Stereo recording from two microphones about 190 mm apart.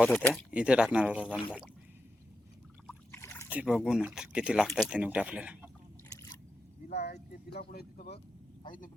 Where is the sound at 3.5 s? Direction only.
5° right (ahead or behind).